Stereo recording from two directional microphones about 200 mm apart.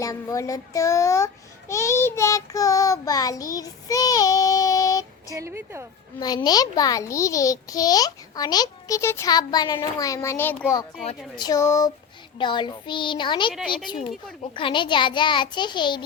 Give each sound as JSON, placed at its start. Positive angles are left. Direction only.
{"t": 0.0, "sound": "child singing", "side_deg": 15}
{"t": 5.3, "sound": "speech", "side_deg": -15}
{"t": 6.1, "sound": "a child's voice", "side_deg": 20}
{"t": 11.3, "sound": "child singing", "side_deg": 20}
{"t": 12.4, "sound": "a child's voice", "side_deg": 25}
{"t": 13.5, "sound": "a woman's voice", "side_deg": 0}
{"t": 14.5, "sound": "a child's voice", "side_deg": 25}